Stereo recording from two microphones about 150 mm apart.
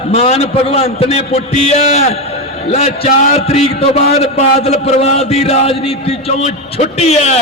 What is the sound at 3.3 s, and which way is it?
A man's voice, 45° left (ahead or behind).